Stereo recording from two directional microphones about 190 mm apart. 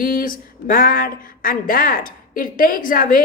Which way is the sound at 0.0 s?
50° left (ahead or behind).